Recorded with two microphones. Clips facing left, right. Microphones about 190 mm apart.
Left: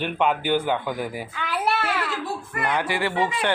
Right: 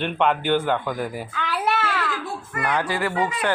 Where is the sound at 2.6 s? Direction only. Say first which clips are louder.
Right 1 dB; 20° left (ahead or behind).